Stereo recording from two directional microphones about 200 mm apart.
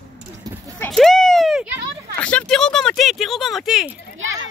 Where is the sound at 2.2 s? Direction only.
5° left (ahead or behind).